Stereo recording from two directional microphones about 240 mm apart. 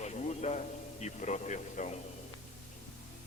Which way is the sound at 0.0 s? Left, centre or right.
Left.